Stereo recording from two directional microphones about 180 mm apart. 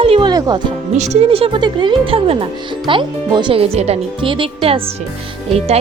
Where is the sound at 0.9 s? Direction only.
40° right (ahead or behind).